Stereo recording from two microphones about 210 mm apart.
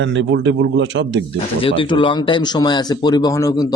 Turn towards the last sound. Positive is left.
turn(degrees=15)  # may be behind; listen again after turning